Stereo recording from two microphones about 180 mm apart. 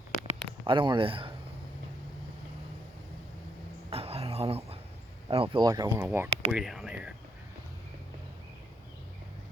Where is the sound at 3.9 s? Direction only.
35° right (ahead or behind).